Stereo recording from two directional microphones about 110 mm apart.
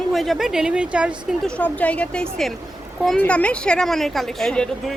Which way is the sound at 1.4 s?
10° left (ahead or behind).